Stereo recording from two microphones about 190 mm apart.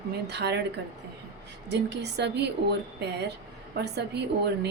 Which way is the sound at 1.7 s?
65° right (ahead or behind).